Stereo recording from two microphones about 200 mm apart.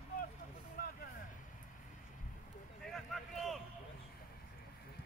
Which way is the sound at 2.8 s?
Centre (ahead or behind).